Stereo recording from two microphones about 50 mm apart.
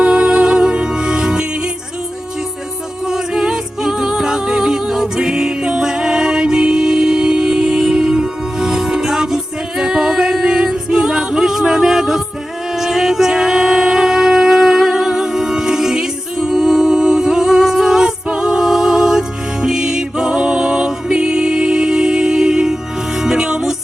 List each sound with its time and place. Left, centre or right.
0.0 s music: centre
3.1 s music: centre